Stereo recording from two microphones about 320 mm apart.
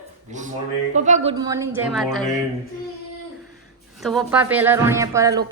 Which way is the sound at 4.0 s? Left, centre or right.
Centre.